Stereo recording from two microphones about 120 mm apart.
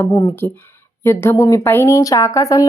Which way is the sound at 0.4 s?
15° left (ahead or behind).